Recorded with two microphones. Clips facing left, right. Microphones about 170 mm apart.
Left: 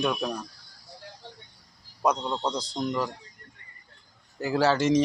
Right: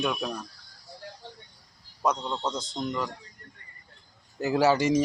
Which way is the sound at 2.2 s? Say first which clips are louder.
Left 2 dB; 15° left (ahead or behind).